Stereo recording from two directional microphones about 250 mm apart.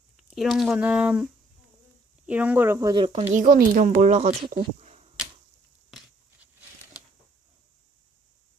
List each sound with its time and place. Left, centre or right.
0.2 s speech: centre
3.3 s speech: right